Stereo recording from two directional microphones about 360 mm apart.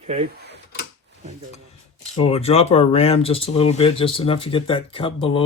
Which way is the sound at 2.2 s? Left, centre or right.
Centre.